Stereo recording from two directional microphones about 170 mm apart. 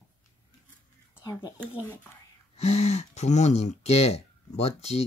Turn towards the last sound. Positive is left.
turn(degrees=40)  # may be behind; listen again after turning